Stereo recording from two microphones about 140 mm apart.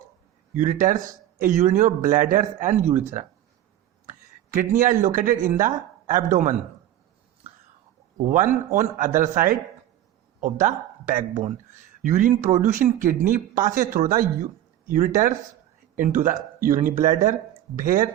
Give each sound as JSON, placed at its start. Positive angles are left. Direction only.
{"t": 0.5, "sound": "a man's voice", "side_deg": -65}
{"t": 4.5, "sound": "speech", "side_deg": -65}
{"t": 8.3, "sound": "a man's voice", "side_deg": -65}